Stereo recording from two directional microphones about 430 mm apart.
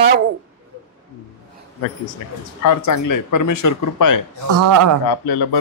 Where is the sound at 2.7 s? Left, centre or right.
Left.